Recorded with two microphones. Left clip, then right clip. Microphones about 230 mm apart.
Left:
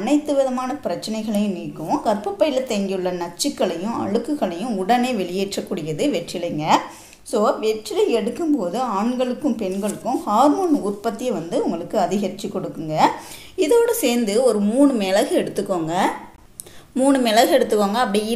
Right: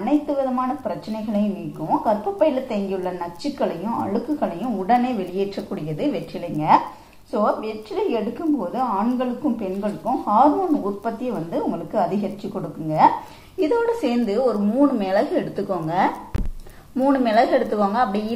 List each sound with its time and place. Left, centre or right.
0.0 s a woman's voice: left
13.6 s a woman's voice: left